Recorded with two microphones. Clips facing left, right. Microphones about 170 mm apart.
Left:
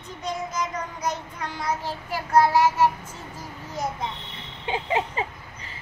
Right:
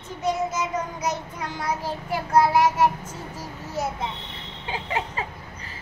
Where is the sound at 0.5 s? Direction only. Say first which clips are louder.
Right 2 dB; 5° right (ahead or behind).